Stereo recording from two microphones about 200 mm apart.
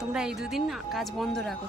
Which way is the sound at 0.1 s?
Centre (ahead or behind).